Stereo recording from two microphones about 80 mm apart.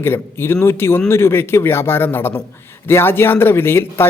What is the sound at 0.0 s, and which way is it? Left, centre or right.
Speech, left.